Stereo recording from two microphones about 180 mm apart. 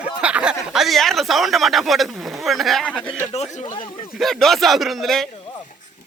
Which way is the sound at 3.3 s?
40° left (ahead or behind).